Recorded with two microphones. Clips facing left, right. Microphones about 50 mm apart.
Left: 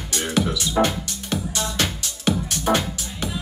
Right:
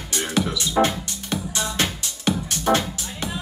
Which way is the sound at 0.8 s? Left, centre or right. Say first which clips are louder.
Right 1 dB; centre.